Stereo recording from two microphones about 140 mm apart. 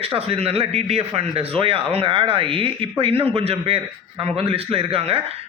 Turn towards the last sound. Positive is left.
turn(degrees=-45)  # may be behind; listen again after turning